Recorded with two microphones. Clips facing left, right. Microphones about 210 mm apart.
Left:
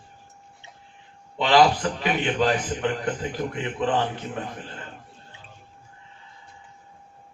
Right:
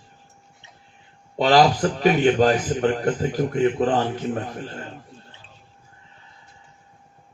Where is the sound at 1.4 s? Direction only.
40° right (ahead or behind).